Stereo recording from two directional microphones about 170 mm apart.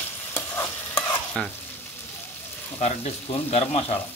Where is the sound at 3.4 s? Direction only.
40° left (ahead or behind).